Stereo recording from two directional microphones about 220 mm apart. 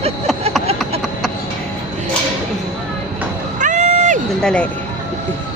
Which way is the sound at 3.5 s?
35° right (ahead or behind).